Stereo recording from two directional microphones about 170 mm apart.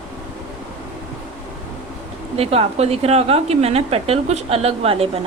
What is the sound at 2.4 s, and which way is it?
A woman's voice, 35° right (ahead or behind).